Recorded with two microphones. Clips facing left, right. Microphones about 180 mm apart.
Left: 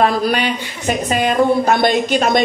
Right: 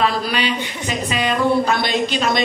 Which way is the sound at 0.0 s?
50° left (ahead or behind).